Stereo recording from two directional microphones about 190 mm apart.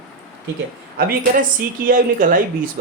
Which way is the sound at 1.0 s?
50° right (ahead or behind).